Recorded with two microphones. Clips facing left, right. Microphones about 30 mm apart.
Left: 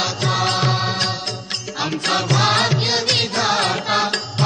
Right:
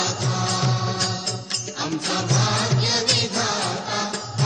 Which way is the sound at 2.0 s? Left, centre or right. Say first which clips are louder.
Left 7 dB; left.